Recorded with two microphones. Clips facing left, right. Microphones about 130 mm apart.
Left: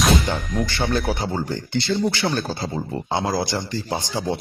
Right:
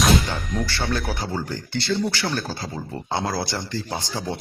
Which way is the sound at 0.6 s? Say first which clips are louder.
Left 5 dB; 20° left (ahead or behind).